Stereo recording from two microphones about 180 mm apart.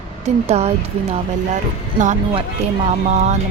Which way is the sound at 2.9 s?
40° right (ahead or behind).